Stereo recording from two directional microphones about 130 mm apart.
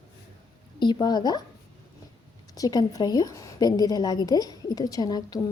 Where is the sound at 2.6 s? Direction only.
30° left (ahead or behind).